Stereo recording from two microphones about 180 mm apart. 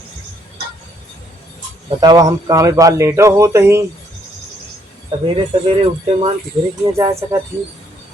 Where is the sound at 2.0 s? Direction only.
20° right (ahead or behind).